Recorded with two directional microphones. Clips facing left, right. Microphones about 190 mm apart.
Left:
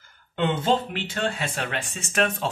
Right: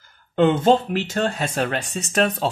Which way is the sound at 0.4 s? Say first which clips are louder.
Right 7 dB; 45° right (ahead or behind).